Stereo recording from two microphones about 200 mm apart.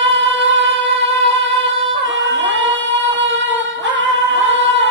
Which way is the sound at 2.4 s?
65° right (ahead or behind).